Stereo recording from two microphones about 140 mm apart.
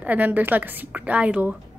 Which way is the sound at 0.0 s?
10° right (ahead or behind).